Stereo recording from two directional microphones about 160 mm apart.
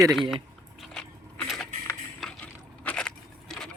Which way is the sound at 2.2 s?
5° left (ahead or behind).